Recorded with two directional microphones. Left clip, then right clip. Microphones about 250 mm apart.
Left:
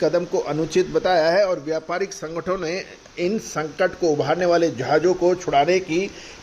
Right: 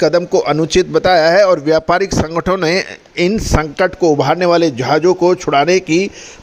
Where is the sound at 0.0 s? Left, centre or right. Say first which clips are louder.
Right 8 dB; right.